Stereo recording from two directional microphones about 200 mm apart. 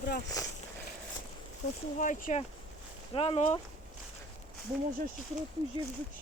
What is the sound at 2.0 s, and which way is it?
Speech, 40° left (ahead or behind).